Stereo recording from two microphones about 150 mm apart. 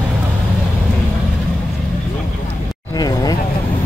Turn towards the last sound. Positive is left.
turn(degrees=25)  # may be behind; listen again after turning